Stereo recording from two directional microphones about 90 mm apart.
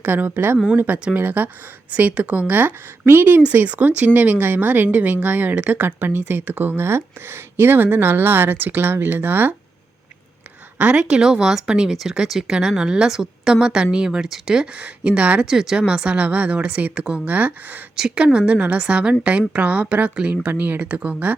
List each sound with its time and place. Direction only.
0.0 s speech: 20° right (ahead or behind)
10.8 s speech: 15° right (ahead or behind)
17.9 s speech: 10° right (ahead or behind)